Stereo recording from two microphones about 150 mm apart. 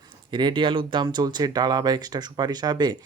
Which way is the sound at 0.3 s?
30° right (ahead or behind).